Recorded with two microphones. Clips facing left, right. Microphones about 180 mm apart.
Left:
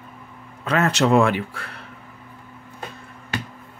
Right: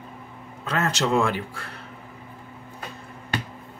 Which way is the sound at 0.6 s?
60° left (ahead or behind).